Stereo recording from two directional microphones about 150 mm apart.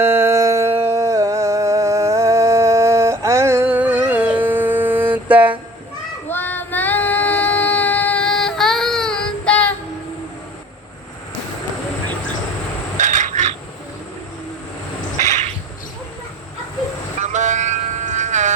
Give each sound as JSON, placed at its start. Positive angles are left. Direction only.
{"t": 0.0, "sound": "music", "side_deg": -15}
{"t": 6.2, "sound": "female singing", "side_deg": 15}
{"t": 13.0, "sound": "a sound", "side_deg": -55}
{"t": 15.2, "sound": "insect", "side_deg": -50}
{"t": 17.2, "sound": "vehicle", "side_deg": -50}